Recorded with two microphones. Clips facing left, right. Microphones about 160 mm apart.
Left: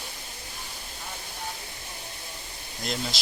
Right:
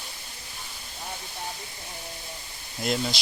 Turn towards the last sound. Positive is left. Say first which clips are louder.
# right 5 dB
turn(degrees=-5)  # may be behind; listen again after turning